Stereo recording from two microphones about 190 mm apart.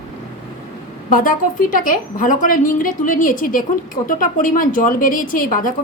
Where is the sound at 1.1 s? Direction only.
45° left (ahead or behind).